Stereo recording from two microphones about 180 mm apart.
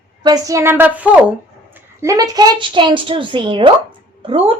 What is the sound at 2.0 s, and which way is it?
A woman's voice, 20° right (ahead or behind).